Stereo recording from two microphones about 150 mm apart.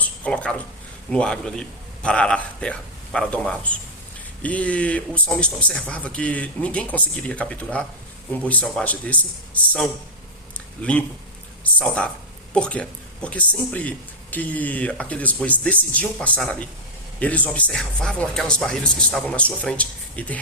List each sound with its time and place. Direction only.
0.2 s speech: 10° left (ahead or behind)
10.8 s speech: 10° left (ahead or behind)